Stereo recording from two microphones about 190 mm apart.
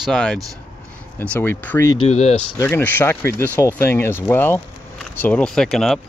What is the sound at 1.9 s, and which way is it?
Speech, 30° left (ahead or behind).